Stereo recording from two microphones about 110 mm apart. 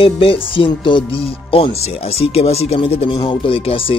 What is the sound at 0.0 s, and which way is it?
Speech, 50° left (ahead or behind).